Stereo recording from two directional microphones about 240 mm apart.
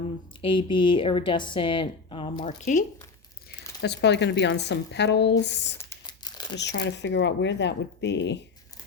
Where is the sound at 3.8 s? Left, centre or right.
Left.